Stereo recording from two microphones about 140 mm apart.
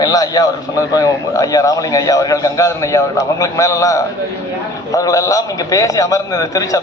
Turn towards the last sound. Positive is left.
turn(degrees=25)  # may be behind; listen again after turning